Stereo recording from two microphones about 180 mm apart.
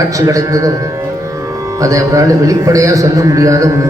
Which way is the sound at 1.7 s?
20° right (ahead or behind).